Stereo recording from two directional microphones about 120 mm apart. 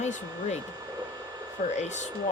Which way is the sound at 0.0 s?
70° left (ahead or behind).